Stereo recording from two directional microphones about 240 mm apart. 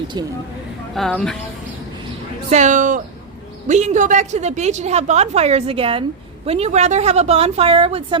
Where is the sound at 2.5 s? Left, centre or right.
Right.